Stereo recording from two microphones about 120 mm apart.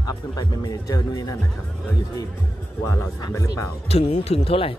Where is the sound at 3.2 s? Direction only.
25° left (ahead or behind).